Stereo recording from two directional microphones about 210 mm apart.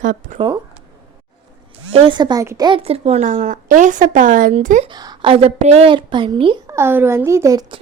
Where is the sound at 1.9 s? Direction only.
20° right (ahead or behind).